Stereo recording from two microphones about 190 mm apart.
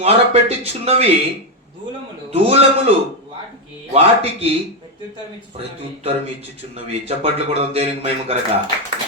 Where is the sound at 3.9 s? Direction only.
35° right (ahead or behind).